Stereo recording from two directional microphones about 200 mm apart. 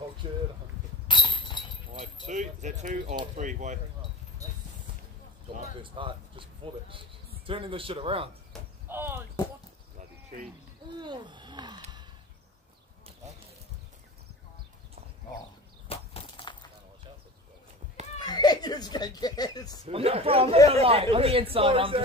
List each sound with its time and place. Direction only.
0.2 s speech: 25° right (ahead or behind)
1.0 s a sound: 25° left (ahead or behind)
2.2 s speech: 35° right (ahead or behind)
5.6 s speech: 25° right (ahead or behind)
8.8 s speech: 10° right (ahead or behind)
11.0 s a sound: 20° right (ahead or behind)
15.9 s a sound: 30° left (ahead or behind)
18.2 s chuckle: 20° left (ahead or behind)
19.9 s speech: 30° right (ahead or behind)